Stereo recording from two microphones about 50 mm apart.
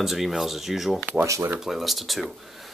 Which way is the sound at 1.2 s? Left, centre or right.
Right.